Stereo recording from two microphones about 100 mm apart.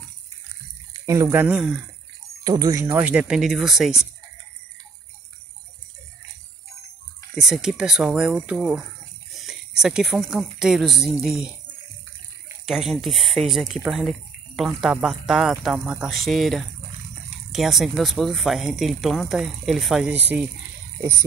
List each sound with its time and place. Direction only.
1.0 s speech: 35° right (ahead or behind)
1.3 s speech: 20° right (ahead or behind)
2.4 s speech: 40° right (ahead or behind)
2.8 s speech: 15° right (ahead or behind)
7.3 s speech: 5° right (ahead or behind)
8.4 s speech: 15° right (ahead or behind)
12.6 s speech: 5° right (ahead or behind)